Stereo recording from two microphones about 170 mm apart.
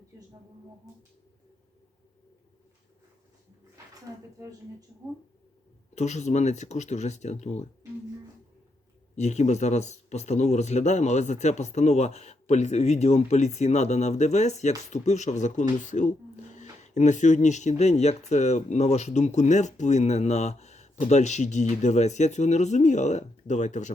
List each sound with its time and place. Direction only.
4.1 s speech: 20° right (ahead or behind)
5.9 s speech: 40° left (ahead or behind)
9.1 s a man's voice: 40° left (ahead or behind)